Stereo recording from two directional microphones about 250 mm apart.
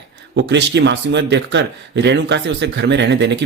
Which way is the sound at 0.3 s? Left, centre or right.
Right.